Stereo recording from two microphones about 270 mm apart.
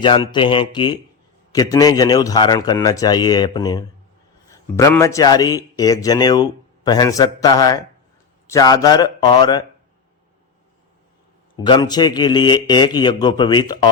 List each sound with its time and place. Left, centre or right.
0.0 s a man's voice: centre
11.5 s a man's voice: centre